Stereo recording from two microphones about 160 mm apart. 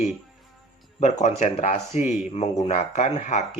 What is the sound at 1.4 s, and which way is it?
Speech, 40° left (ahead or behind).